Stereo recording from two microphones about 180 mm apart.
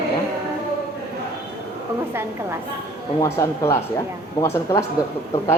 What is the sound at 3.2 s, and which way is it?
Speech, 15° left (ahead or behind).